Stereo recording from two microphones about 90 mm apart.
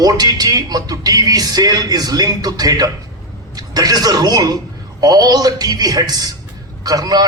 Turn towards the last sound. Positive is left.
turn(degrees=-45)  # may be behind; listen again after turning